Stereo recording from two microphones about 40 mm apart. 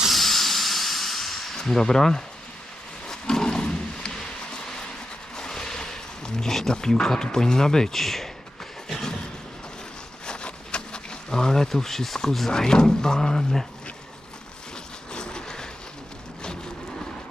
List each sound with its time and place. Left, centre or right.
0.0 s hiss: centre
1.5 s speech: centre
3.1 s roaring cats: centre
4.2 s a sound: centre
5.4 s speech: centre
8.9 s a sound: centre
10.2 s insect: left; by 12.5 s centre
12.5 s speech: centre
15.1 s a sound: left